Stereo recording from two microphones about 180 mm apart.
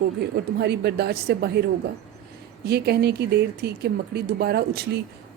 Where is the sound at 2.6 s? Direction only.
65° right (ahead or behind).